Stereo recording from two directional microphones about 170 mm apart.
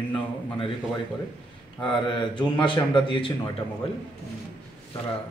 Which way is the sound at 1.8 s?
30° left (ahead or behind).